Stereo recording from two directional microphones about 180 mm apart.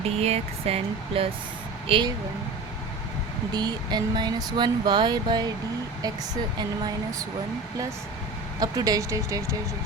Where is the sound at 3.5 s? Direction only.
25° right (ahead or behind).